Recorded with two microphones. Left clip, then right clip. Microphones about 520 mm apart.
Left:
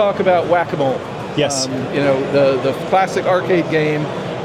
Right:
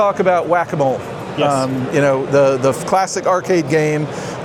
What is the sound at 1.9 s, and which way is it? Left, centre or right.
Speech, right.